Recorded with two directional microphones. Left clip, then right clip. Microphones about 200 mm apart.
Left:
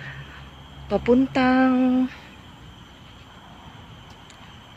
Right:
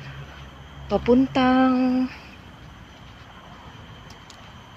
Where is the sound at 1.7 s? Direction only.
15° left (ahead or behind).